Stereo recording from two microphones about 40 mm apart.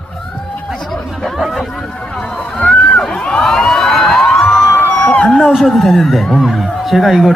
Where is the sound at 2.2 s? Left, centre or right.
Centre.